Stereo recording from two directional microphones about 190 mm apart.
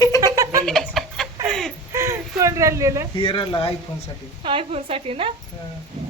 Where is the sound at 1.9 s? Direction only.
15° right (ahead or behind).